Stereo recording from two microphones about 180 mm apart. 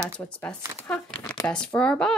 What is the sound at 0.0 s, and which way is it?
Speech, 5° left (ahead or behind).